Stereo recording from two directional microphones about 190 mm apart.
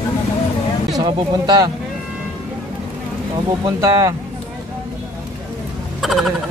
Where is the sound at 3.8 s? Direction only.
15° right (ahead or behind).